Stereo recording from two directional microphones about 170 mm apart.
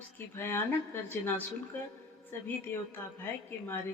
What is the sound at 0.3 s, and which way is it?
Speech, 15° left (ahead or behind).